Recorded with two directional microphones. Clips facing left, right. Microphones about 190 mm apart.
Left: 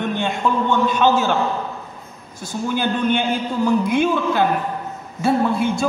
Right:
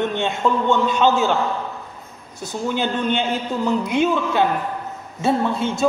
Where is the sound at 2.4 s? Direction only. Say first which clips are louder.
Even; 20° right (ahead or behind).